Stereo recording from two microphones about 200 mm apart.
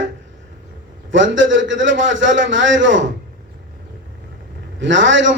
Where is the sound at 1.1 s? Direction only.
70° right (ahead or behind).